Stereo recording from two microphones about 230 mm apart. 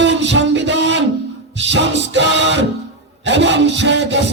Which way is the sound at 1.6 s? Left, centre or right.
Right.